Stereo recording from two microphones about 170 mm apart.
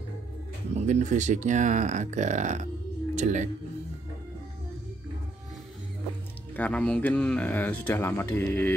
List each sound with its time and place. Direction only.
0.7 s speech: 45° right (ahead or behind)
6.5 s speech: 10° left (ahead or behind)